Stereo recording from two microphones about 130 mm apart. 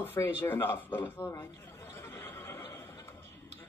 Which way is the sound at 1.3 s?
20° left (ahead or behind).